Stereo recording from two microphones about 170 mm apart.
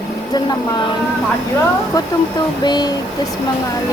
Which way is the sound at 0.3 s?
25° left (ahead or behind).